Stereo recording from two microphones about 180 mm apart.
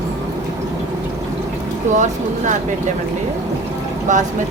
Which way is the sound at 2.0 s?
45° right (ahead or behind).